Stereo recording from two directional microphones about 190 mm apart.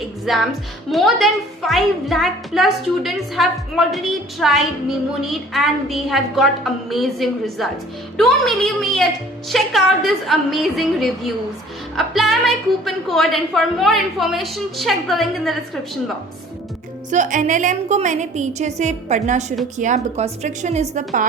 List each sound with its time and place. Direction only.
0.3 s a woman's voice: centre (ahead or behind)
17.1 s a woman's voice: 40° right (ahead or behind)